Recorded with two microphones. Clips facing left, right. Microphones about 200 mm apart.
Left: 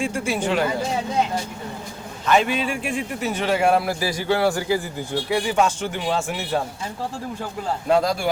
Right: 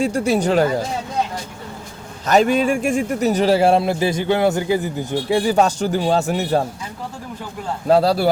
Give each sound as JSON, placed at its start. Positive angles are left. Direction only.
{"t": 0.0, "sound": "speech", "side_deg": -40}
{"t": 2.2, "sound": "speech", "side_deg": -40}
{"t": 5.3, "sound": "speech", "side_deg": -35}
{"t": 7.9, "sound": "speech", "side_deg": -35}